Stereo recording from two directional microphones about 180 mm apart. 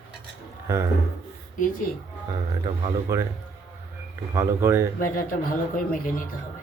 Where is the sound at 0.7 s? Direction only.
15° right (ahead or behind).